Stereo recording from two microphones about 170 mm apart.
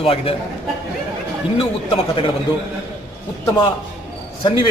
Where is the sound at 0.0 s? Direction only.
35° left (ahead or behind).